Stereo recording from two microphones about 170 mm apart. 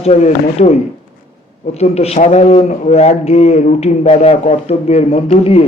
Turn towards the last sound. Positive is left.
turn(degrees=35)  # may be behind; listen again after turning